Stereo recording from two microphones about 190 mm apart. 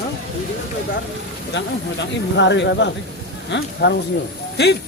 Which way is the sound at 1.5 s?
70° left (ahead or behind).